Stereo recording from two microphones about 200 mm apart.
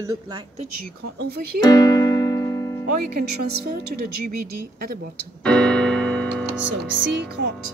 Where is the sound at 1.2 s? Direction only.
50° right (ahead or behind).